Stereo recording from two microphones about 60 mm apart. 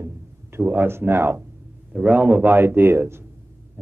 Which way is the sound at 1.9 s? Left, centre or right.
Right.